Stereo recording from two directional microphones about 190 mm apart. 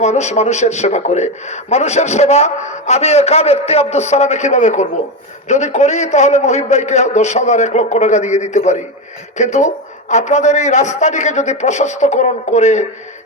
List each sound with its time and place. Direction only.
0.0 s a man's voice: 35° left (ahead or behind)